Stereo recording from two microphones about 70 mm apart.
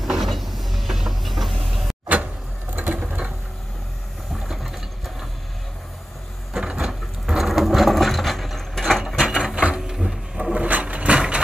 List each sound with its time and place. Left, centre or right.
0.0 s vehicle: centre
2.7 s patter: right
4.3 s ratchet: centre
6.5 s wood: centre
9.0 s a sound: centre